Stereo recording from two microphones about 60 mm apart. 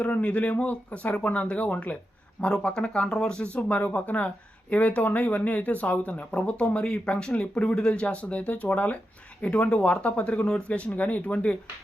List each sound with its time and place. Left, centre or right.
0.0 s speech: left